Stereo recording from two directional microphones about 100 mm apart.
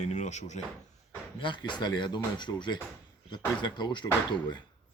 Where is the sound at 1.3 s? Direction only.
55° left (ahead or behind).